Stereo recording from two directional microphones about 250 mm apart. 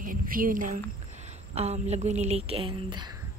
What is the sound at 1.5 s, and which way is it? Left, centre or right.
Speech, right.